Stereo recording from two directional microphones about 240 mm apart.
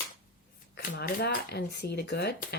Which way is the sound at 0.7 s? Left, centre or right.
Left.